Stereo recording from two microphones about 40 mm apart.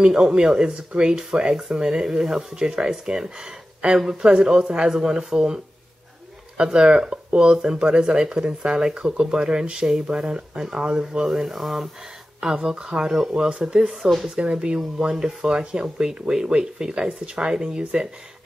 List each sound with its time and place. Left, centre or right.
0.2 s speech: right
0.5 s speech: centre
12.4 s speech: right